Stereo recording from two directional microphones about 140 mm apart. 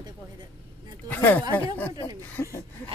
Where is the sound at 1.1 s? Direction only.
10° left (ahead or behind).